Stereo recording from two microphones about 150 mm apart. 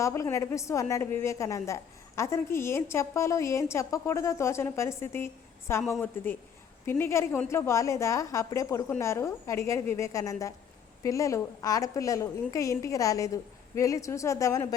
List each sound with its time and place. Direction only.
0.0 s a woman's voice: 20° left (ahead or behind)